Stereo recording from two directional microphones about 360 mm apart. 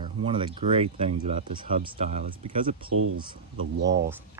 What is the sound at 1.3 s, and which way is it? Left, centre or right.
Speech, centre.